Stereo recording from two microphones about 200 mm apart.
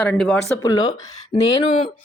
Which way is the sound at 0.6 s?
20° left (ahead or behind).